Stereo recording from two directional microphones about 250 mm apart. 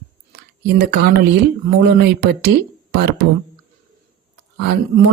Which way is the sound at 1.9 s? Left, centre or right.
Right.